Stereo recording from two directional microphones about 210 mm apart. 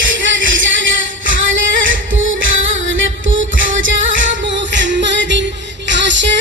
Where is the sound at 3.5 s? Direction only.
65° right (ahead or behind).